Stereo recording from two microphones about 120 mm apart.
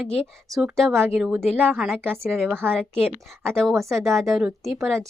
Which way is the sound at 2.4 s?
20° right (ahead or behind).